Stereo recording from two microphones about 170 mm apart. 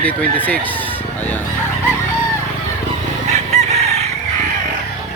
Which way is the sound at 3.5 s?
40° right (ahead or behind).